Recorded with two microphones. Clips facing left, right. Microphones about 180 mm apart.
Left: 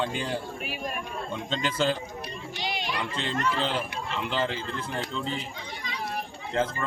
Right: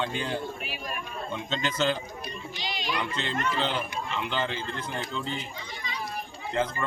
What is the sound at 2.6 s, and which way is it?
Chatter, 60° left (ahead or behind).